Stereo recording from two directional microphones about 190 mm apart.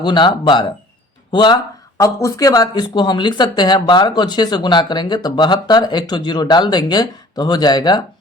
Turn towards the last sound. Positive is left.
turn(degrees=20)  # may be behind; listen again after turning